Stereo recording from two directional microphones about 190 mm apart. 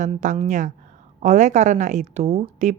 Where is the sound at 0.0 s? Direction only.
40° right (ahead or behind).